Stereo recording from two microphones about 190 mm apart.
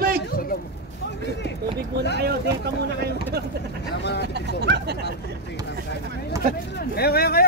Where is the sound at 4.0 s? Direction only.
60° left (ahead or behind).